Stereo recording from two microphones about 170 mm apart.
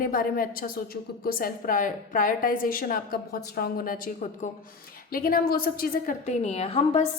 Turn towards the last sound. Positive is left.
turn(degrees=35)  # may be behind; listen again after turning